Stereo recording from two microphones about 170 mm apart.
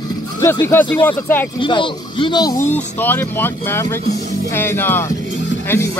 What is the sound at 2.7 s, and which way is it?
Speech, 10° left (ahead or behind).